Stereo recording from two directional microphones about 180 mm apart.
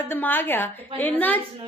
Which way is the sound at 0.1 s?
10° left (ahead or behind).